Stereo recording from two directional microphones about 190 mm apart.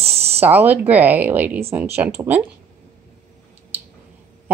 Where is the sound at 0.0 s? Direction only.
30° right (ahead or behind).